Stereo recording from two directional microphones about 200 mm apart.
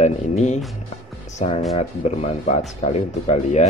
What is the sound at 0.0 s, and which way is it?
Speech, 35° left (ahead or behind).